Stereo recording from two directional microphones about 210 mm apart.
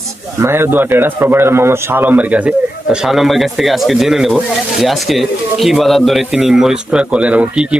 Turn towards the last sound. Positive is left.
turn(degrees=-5)  # may be behind; listen again after turning